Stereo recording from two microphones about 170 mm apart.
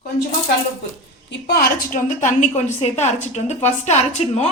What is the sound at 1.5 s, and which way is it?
A woman's voice, 60° left (ahead or behind).